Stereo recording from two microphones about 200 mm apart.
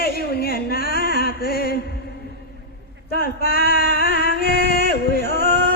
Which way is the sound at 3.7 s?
45° left (ahead or behind).